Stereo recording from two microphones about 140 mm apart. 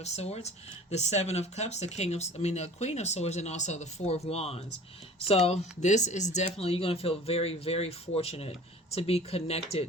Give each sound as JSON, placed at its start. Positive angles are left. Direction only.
{"t": 0.0, "sound": "speech", "side_deg": 50}